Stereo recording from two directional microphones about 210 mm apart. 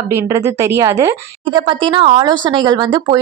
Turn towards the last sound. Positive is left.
turn(degrees=-20)  # may be behind; listen again after turning